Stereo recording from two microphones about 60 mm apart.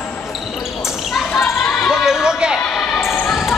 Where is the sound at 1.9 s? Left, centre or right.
Centre.